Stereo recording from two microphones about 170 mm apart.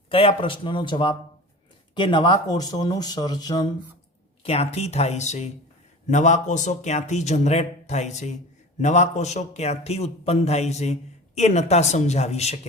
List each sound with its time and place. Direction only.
0.1 s a man's voice: 35° left (ahead or behind)
4.4 s a man's voice: 35° left (ahead or behind)